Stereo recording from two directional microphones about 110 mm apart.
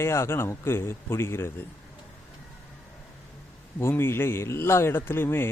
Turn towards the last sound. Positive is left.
turn(degrees=20)  # may be behind; listen again after turning